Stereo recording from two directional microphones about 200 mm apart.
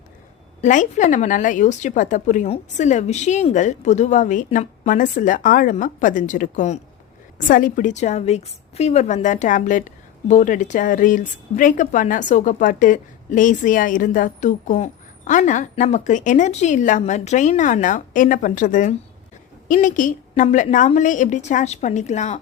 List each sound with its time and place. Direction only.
0.6 s a woman's voice: 40° left (ahead or behind)